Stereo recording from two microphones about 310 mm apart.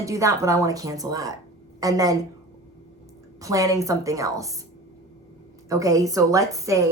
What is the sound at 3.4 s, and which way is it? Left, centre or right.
Speech, centre.